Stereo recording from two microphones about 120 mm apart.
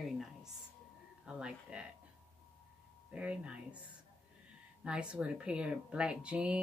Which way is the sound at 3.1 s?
10° right (ahead or behind).